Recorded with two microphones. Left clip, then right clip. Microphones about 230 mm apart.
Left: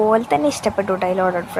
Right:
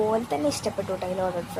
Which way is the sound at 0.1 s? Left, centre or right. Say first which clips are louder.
Left 9 dB; left.